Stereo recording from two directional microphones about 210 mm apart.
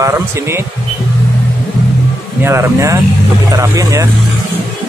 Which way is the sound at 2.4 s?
10° right (ahead or behind).